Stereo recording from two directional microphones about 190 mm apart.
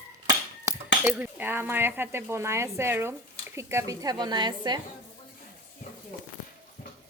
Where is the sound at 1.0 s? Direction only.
10° right (ahead or behind).